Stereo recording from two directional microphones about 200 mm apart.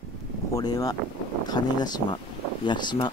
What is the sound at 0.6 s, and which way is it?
Speech, 20° left (ahead or behind).